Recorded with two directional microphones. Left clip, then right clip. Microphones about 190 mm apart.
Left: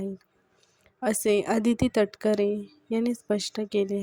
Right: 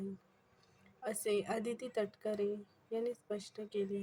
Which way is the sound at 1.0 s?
50° left (ahead or behind).